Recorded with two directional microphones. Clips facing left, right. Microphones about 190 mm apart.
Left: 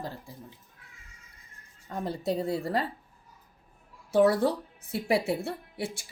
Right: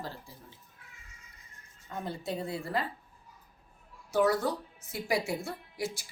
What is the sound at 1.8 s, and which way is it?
Speech, 35° left (ahead or behind).